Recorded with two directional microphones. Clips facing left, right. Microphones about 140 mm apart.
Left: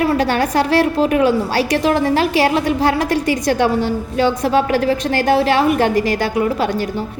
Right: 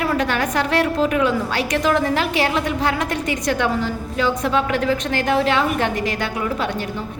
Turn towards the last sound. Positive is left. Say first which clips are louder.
# left 7 dB
turn(degrees=35)  # may be behind; listen again after turning